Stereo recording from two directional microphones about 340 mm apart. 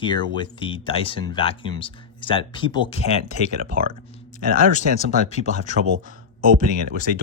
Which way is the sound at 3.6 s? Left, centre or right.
Right.